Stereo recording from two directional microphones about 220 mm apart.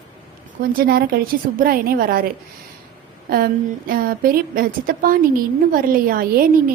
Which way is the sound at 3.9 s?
40° right (ahead or behind).